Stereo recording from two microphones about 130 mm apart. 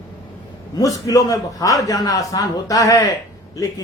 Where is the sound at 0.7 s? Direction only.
25° left (ahead or behind).